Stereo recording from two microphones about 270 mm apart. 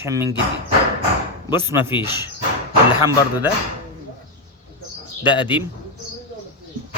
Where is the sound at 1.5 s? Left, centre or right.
Centre.